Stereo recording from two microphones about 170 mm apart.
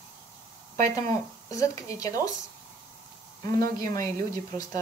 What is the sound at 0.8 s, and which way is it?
Speech, 20° left (ahead or behind).